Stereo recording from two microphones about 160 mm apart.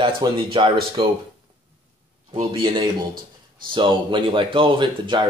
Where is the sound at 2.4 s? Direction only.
30° right (ahead or behind).